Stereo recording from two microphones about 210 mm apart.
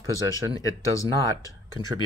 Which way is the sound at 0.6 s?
15° left (ahead or behind).